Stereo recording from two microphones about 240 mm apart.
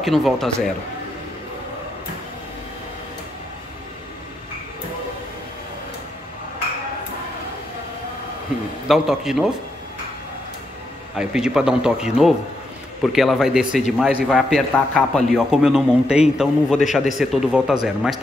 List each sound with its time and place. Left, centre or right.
0.0 s a man's voice: centre
8.8 s a man's voice: centre
11.1 s a man's voice: centre